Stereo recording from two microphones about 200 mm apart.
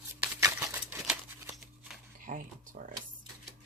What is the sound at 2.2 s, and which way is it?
Speech, 40° right (ahead or behind).